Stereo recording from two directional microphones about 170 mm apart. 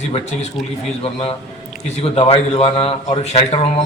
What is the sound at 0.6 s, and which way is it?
Speech, centre (ahead or behind).